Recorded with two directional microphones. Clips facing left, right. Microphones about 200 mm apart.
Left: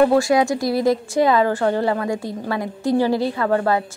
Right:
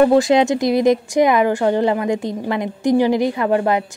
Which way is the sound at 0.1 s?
20° right (ahead or behind).